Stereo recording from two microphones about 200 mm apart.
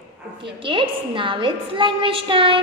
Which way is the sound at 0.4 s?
25° right (ahead or behind).